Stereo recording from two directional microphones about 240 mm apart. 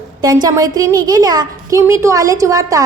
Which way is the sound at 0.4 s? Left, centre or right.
Centre.